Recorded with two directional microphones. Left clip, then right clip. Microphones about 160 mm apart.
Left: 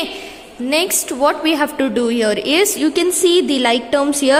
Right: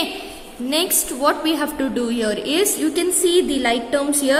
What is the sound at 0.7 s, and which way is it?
A woman's voice, 25° left (ahead or behind).